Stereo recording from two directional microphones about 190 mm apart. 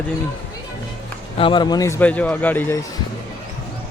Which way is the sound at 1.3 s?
25° left (ahead or behind).